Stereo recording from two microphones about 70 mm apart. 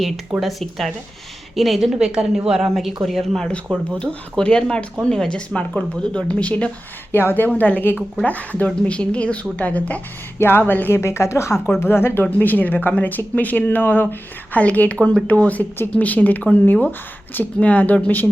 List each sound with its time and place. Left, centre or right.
0.3 s speech: centre
1.5 s a woman's voice: centre
3.8 s a woman's voice: centre